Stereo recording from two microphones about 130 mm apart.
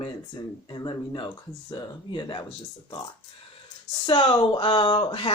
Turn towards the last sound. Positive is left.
turn(degrees=40)  # may be behind; listen again after turning